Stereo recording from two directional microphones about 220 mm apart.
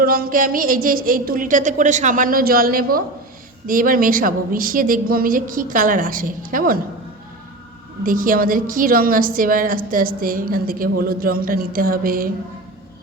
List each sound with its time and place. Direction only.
0.0 s a woman's voice: 40° right (ahead or behind)
8.0 s a woman's voice: 40° right (ahead or behind)